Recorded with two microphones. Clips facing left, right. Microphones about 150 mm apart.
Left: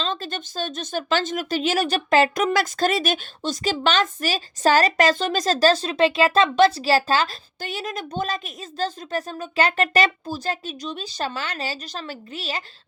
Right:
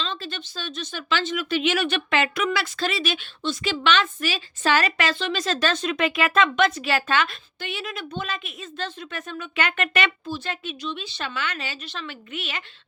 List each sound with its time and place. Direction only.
0.0 s speech: 45° left (ahead or behind)